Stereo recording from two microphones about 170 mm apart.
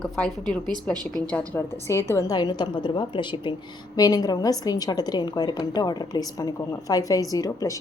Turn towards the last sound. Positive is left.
turn(degrees=20)  # may be behind; listen again after turning